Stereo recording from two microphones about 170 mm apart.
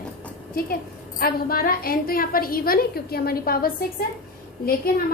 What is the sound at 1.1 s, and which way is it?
A woman's voice, 60° left (ahead or behind).